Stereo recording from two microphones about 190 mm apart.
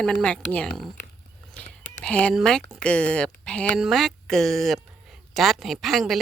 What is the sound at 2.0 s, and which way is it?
Speech, 5° left (ahead or behind).